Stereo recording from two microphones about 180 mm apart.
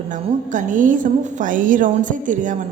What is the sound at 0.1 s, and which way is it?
A woman's voice, 45° right (ahead or behind).